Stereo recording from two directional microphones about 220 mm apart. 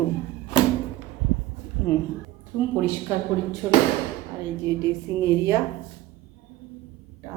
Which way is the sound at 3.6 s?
15° right (ahead or behind).